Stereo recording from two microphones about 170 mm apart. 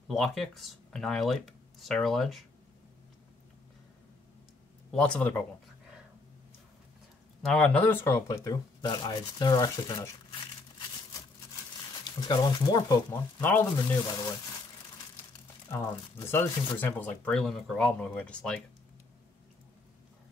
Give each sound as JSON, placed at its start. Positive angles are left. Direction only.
{"t": 0.1, "sound": "speech", "side_deg": 0}
{"t": 4.9, "sound": "speech", "side_deg": 5}
{"t": 7.4, "sound": "speech", "side_deg": 5}
{"t": 12.2, "sound": "speech", "side_deg": 30}
{"t": 13.4, "sound": "speech", "side_deg": 10}
{"t": 15.7, "sound": "speech", "side_deg": 15}